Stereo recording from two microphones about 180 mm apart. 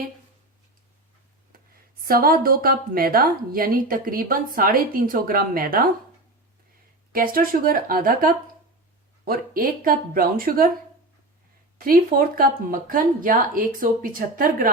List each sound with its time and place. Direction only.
1.5 s speech: 55° right (ahead or behind)
7.1 s speech: 55° right (ahead or behind)
11.8 s speech: 50° right (ahead or behind)